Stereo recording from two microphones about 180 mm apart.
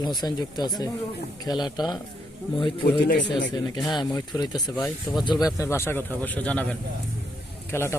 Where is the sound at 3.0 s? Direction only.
70° left (ahead or behind).